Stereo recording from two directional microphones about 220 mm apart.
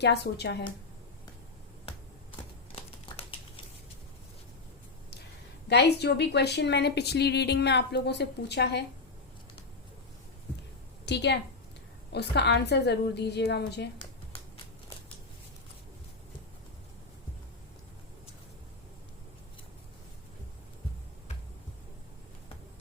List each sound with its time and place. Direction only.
0.0 s a woman's voice: 50° left (ahead or behind)
5.6 s a woman's voice: 50° left (ahead or behind)
11.0 s a woman's voice: 50° left (ahead or behind)